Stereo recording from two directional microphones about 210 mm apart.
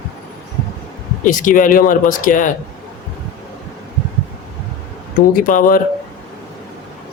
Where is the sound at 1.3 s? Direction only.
40° left (ahead or behind).